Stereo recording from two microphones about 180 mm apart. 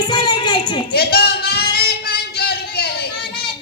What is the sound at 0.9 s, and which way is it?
Singing, 60° left (ahead or behind).